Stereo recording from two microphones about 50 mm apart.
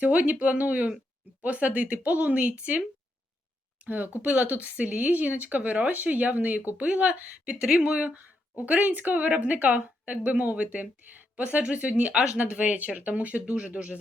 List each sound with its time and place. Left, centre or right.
0.0 s speech: right
3.8 s speech: right